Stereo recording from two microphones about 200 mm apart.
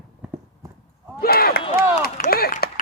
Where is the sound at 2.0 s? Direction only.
50° left (ahead or behind).